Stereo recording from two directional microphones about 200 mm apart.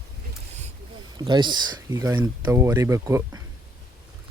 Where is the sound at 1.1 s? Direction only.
20° right (ahead or behind).